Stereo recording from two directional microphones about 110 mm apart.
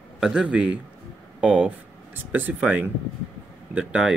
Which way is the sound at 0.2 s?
10° right (ahead or behind).